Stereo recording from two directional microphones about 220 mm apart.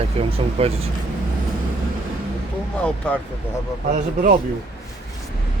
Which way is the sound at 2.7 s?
5° left (ahead or behind).